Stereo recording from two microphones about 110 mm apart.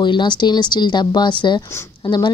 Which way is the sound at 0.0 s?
45° left (ahead or behind).